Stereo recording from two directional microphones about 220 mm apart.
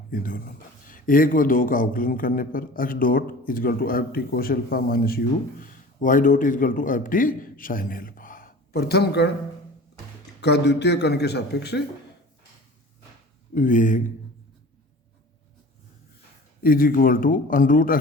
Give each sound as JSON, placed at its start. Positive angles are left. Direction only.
{"t": 0.1, "sound": "speech", "side_deg": 40}
{"t": 10.4, "sound": "a man's voice", "side_deg": 50}
{"t": 13.5, "sound": "speech", "side_deg": 35}
{"t": 16.6, "sound": "speech", "side_deg": 40}